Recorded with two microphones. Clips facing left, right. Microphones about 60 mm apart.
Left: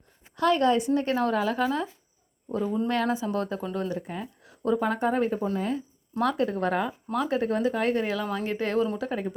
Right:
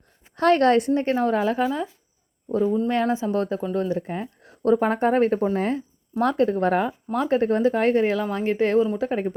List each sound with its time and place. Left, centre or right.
0.3 s a woman's voice: right
1.1 s speech: right
1.6 s speech: centre
2.5 s speech: right
6.1 s speech: right